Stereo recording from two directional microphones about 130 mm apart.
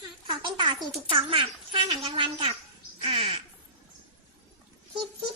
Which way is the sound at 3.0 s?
45° right (ahead or behind).